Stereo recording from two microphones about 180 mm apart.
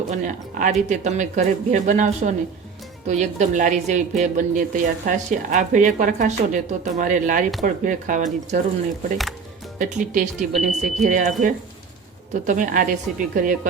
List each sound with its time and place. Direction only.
0.6 s a woman's voice: 45° right (ahead or behind)
9.7 s a woman's voice: 45° right (ahead or behind)